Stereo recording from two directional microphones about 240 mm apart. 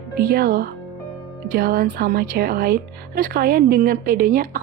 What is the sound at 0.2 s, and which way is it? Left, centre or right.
A woman's voice, right.